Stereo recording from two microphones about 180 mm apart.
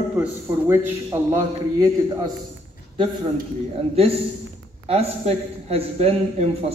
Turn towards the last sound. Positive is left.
turn(degrees=-35)  # may be behind; listen again after turning